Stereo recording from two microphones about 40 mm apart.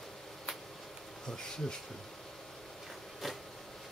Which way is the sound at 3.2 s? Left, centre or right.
Centre.